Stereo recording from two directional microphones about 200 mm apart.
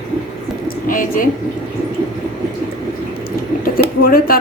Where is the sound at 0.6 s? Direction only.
45° left (ahead or behind).